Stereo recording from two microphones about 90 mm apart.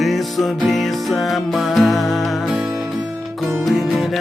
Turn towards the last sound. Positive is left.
turn(degrees=0)  # may be behind; listen again after turning